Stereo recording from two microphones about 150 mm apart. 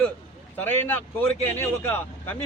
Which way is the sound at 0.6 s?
15° left (ahead or behind).